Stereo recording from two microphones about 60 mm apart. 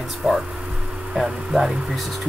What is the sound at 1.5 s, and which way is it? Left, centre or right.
Speech, centre.